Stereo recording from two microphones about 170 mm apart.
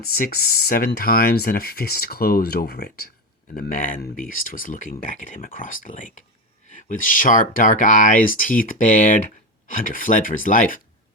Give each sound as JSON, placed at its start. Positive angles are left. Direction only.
{"t": 0.0, "sound": "speech", "side_deg": 60}